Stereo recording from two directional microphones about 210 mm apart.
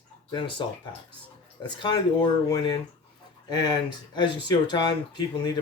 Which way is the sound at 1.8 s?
20° left (ahead or behind).